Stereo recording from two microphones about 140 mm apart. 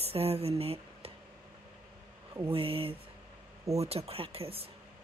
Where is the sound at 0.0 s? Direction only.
45° right (ahead or behind).